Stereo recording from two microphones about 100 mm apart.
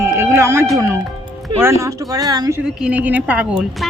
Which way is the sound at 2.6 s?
10° right (ahead or behind).